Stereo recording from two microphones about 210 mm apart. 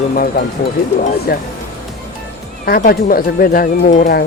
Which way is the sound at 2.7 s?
45° left (ahead or behind).